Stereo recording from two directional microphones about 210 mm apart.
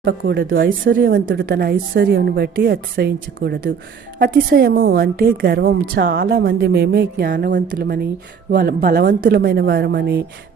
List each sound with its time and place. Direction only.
0.0 s speech: 55° right (ahead or behind)
1.3 s a woman's voice: 45° right (ahead or behind)